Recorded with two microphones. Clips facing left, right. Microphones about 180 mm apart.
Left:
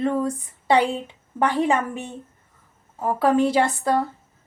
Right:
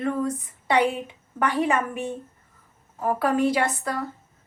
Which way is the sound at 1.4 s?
25° left (ahead or behind).